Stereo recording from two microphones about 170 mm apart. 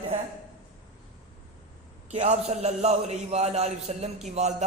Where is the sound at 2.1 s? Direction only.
40° right (ahead or behind).